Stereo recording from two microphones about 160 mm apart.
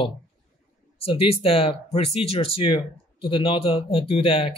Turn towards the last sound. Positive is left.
turn(degrees=35)  # may be behind; listen again after turning